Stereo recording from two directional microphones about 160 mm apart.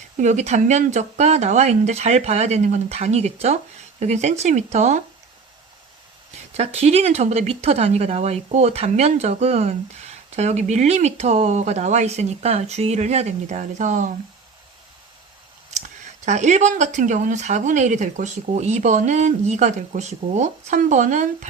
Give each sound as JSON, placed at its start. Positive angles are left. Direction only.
{"t": 0.2, "sound": "speech", "side_deg": -45}
{"t": 6.6, "sound": "speech", "side_deg": -40}
{"t": 16.2, "sound": "speech", "side_deg": -45}